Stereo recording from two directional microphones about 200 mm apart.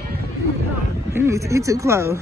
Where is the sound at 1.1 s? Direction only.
15° right (ahead or behind).